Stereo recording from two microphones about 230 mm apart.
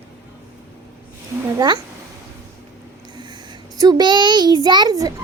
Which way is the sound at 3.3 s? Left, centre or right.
Centre.